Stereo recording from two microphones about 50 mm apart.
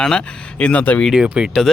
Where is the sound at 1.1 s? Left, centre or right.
Centre.